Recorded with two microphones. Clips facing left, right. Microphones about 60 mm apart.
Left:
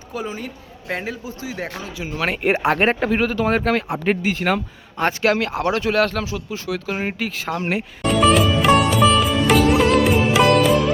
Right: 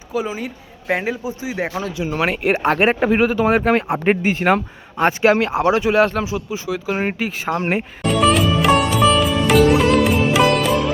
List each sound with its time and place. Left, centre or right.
0.1 s speech: centre
2.2 s speech: centre
7.6 s speech: right
8.0 s sitar: centre